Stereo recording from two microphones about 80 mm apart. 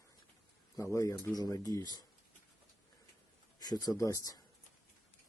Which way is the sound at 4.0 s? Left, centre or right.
Left.